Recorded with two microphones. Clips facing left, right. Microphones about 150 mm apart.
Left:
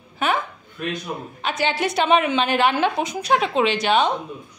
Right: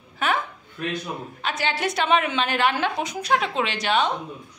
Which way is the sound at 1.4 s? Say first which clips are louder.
Left 3 dB; 20° left (ahead or behind).